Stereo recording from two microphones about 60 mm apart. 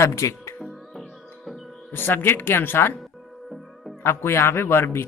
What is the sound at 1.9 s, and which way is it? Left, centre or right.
Speech, left.